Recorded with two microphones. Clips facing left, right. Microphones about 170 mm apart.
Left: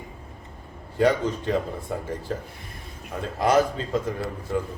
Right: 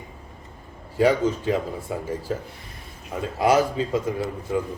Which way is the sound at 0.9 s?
5° right (ahead or behind).